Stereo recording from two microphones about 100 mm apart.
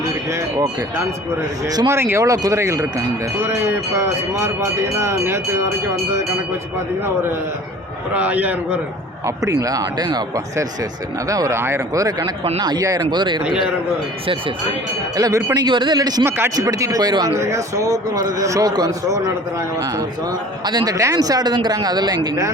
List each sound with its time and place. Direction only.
0.3 s a sound: 30° right (ahead or behind)
1.9 s speech: 25° right (ahead or behind)
8.1 s a man's voice: 15° right (ahead or behind)
9.2 s speech: 35° right (ahead or behind)
12.5 s speech: 45° right (ahead or behind)
13.0 s speech: 50° right (ahead or behind)
13.4 s a man's voice: 5° right (ahead or behind)
15.1 s speech: 35° right (ahead or behind)
15.5 s speech: 50° right (ahead or behind)
17.4 s speech: 30° right (ahead or behind); by 20.9 s 45° right (ahead or behind)
20.9 s speech: 35° right (ahead or behind)